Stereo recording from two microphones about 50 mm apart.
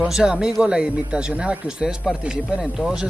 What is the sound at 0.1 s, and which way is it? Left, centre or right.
Speech, centre.